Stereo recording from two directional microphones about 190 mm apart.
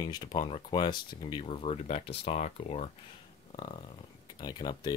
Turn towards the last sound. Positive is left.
turn(degrees=20)  # may be behind; listen again after turning